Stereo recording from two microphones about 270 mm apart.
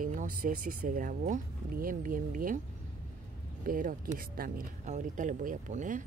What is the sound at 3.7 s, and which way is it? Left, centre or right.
Speech, right.